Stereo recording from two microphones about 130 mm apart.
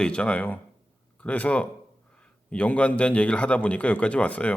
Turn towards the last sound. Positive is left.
turn(degrees=10)  # may be behind; listen again after turning